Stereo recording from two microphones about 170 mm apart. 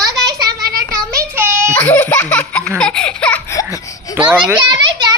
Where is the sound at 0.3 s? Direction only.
20° right (ahead or behind).